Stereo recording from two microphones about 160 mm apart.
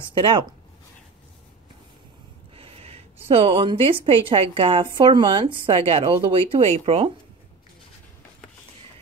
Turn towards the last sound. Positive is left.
turn(degrees=-35)  # may be behind; listen again after turning